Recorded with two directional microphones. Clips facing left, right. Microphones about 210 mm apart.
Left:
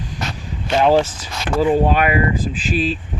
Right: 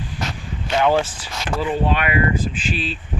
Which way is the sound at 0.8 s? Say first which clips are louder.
Left 3 dB; 35° left (ahead or behind).